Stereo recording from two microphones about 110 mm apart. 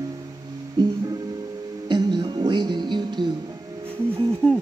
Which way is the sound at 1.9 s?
40° right (ahead or behind).